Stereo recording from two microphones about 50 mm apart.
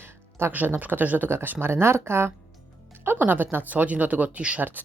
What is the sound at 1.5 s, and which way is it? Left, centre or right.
Speech, right.